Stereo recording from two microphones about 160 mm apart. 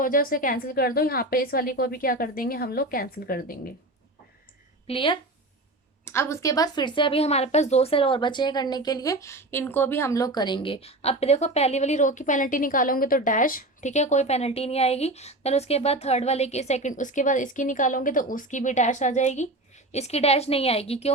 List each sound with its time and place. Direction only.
0.0 s a woman's voice: 60° left (ahead or behind)
4.9 s speech: 35° left (ahead or behind)
6.1 s speech: 15° left (ahead or behind); by 21.1 s 40° left (ahead or behind)